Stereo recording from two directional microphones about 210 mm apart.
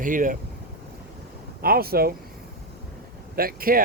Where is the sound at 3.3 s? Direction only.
45° right (ahead or behind).